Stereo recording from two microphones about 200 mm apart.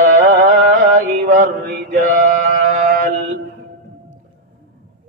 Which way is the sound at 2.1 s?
40° right (ahead or behind).